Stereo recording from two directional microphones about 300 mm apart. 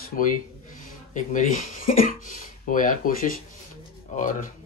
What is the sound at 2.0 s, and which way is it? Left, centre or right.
A man's voice, left.